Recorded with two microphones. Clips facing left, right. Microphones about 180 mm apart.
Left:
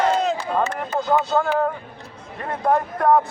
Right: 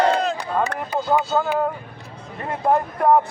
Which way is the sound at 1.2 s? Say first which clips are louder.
Left 1 dB; 5° right (ahead or behind).